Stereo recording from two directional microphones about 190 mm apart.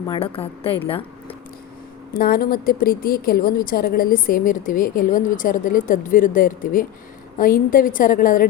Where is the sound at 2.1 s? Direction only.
50° left (ahead or behind).